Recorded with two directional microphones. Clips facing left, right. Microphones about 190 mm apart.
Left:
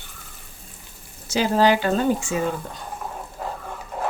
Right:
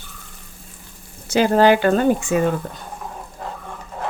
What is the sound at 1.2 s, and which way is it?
Speech, 55° right (ahead or behind).